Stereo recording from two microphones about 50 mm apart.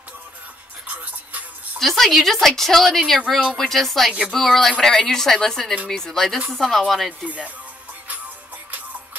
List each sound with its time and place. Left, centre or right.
1.8 s a woman's voice: centre
7.2 s speech: right